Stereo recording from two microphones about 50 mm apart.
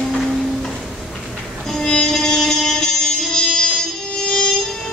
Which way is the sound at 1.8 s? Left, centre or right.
Centre.